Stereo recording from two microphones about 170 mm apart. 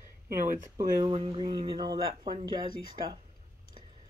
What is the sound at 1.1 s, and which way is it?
Speech, 30° right (ahead or behind).